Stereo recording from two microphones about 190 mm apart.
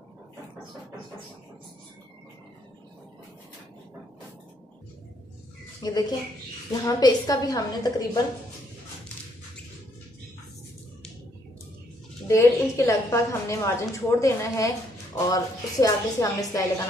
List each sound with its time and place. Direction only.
5.8 s a woman's voice: 20° left (ahead or behind)
12.3 s a woman's voice: 15° left (ahead or behind)